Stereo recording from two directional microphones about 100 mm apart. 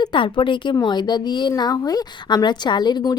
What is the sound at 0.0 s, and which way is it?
Speech, 55° left (ahead or behind).